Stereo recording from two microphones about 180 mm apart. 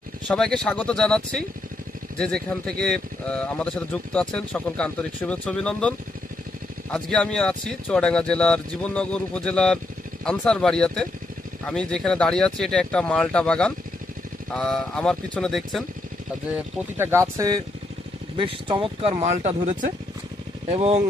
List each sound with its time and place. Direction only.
0.3 s speech: 5° left (ahead or behind)
6.9 s speech: 5° left (ahead or behind)
17.0 s speech: 15° right (ahead or behind)
18.3 s speech: 30° right (ahead or behind)